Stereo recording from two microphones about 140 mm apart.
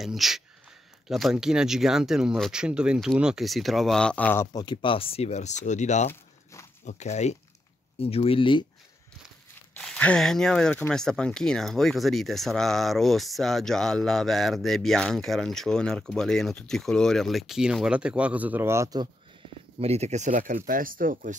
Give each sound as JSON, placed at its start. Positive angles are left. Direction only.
{"t": 0.0, "sound": "speech", "side_deg": 0}
{"t": 4.6, "sound": "speech", "side_deg": 35}
{"t": 9.8, "sound": "speech", "side_deg": 5}
{"t": 19.8, "sound": "speech", "side_deg": -50}